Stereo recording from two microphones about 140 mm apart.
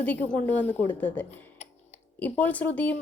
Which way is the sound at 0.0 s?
10° left (ahead or behind).